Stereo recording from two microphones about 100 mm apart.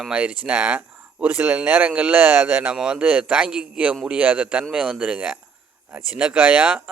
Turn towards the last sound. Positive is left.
turn(degrees=-15)  # may be behind; listen again after turning